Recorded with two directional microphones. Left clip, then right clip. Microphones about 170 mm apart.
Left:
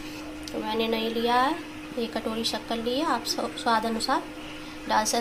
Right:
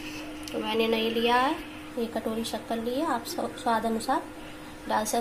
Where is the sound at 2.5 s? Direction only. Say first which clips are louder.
Left 2 dB; 5° right (ahead or behind).